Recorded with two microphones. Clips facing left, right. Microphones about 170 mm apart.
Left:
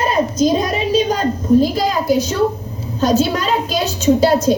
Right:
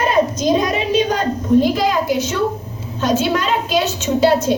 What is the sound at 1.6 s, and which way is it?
A woman's voice, 35° left (ahead or behind).